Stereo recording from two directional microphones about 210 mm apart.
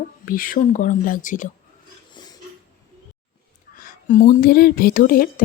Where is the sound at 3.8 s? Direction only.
40° left (ahead or behind).